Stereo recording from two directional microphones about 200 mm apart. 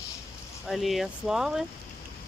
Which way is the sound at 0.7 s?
Centre (ahead or behind).